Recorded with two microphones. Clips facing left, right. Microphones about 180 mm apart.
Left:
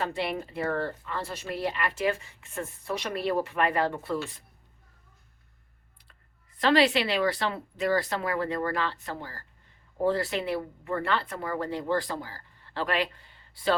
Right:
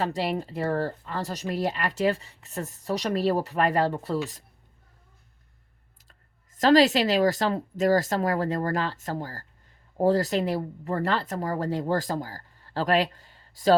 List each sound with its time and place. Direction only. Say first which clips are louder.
0.0 s speech: right 3 dB; 40° right (ahead or behind)
6.0 s speech: right 1 dB; 45° right (ahead or behind)